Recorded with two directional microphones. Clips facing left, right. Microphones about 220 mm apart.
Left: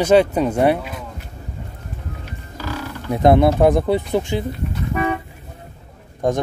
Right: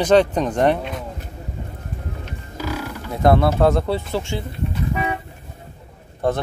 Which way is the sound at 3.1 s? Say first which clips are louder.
Left 3 dB; 20° left (ahead or behind).